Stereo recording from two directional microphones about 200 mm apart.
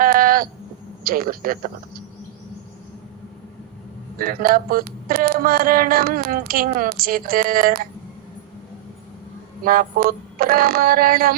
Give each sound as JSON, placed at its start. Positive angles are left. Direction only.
{"t": 0.0, "sound": "a sound", "side_deg": -45}
{"t": 1.0, "sound": "speech", "side_deg": -45}
{"t": 4.2, "sound": "speech", "side_deg": -45}
{"t": 9.6, "sound": "speech", "side_deg": -45}